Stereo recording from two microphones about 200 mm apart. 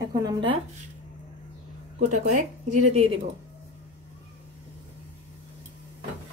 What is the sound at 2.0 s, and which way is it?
Speech, 40° right (ahead or behind).